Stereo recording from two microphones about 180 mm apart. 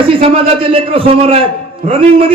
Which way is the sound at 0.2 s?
30° right (ahead or behind).